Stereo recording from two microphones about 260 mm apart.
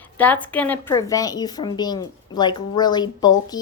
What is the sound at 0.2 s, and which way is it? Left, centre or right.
A woman's voice, centre.